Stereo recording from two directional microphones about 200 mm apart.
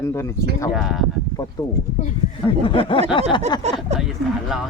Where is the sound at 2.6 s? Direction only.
25° left (ahead or behind).